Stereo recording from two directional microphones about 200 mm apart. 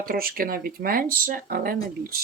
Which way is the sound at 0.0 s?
45° right (ahead or behind).